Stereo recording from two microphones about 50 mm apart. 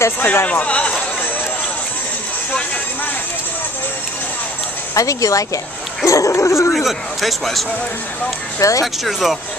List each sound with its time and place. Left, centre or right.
0.2 s speech: left
0.5 s speech: left
4.9 s speech: left
6.7 s a man's voice: centre
8.5 s speech: left
8.8 s a man's voice: centre